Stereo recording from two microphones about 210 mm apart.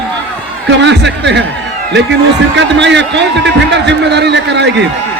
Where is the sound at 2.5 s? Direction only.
55° right (ahead or behind).